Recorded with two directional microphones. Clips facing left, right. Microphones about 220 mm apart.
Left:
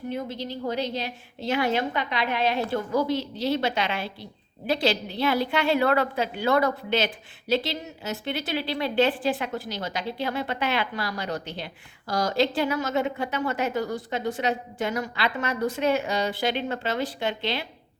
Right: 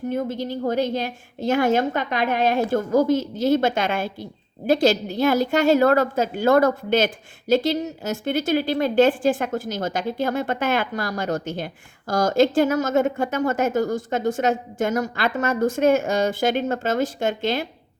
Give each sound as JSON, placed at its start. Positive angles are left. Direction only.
{"t": 0.1, "sound": "a woman's voice", "side_deg": -50}